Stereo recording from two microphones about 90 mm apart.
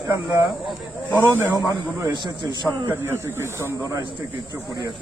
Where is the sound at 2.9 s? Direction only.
30° right (ahead or behind).